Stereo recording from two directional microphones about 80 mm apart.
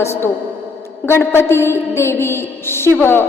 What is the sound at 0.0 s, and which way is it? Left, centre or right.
A woman's voice, left.